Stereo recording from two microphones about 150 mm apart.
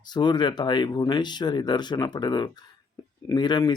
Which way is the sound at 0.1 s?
30° left (ahead or behind).